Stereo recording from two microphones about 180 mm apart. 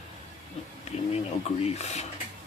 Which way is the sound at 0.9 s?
35° left (ahead or behind).